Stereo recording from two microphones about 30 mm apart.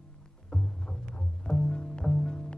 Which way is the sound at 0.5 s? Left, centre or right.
Left.